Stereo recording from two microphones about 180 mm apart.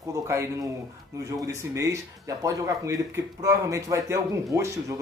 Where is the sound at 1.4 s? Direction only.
15° right (ahead or behind).